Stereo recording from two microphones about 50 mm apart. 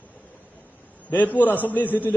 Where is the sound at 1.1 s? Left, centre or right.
Left.